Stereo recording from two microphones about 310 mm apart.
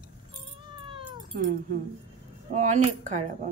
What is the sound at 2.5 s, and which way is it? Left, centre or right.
Speech, right.